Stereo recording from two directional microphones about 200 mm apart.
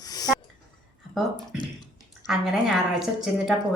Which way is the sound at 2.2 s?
Centre (ahead or behind).